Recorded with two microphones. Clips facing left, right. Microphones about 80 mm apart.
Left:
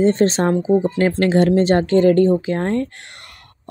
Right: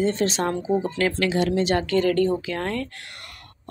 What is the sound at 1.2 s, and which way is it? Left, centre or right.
Speech, left.